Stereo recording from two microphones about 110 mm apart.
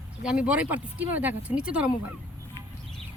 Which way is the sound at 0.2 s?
10° right (ahead or behind).